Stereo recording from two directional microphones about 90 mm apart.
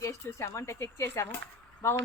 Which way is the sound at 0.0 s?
30° left (ahead or behind).